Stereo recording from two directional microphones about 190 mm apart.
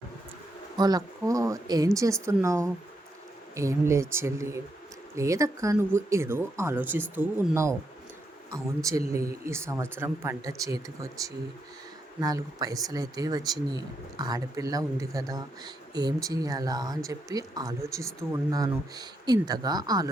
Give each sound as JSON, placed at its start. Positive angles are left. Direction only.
{"t": 0.8, "sound": "speech", "side_deg": -20}